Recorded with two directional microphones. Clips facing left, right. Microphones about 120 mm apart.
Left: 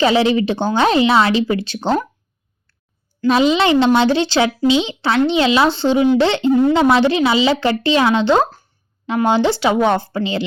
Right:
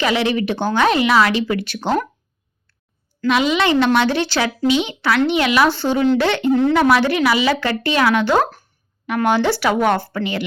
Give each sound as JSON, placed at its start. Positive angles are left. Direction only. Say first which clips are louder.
{"t": 0.0, "sound": "speech", "louder": "left 4 dB", "side_deg": 30}
{"t": 3.2, "sound": "speech", "louder": "left 3 dB", "side_deg": 30}
{"t": 6.5, "sound": "speech", "louder": "left 2 dB", "side_deg": 10}
{"t": 6.7, "sound": "speech", "louder": "left 2 dB", "side_deg": 25}